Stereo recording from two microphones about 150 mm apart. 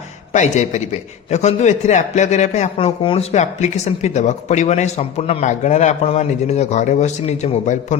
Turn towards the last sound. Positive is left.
turn(degrees=50)  # may be behind; listen again after turning